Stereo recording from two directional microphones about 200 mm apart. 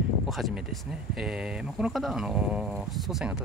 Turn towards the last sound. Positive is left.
turn(degrees=-5)  # may be behind; listen again after turning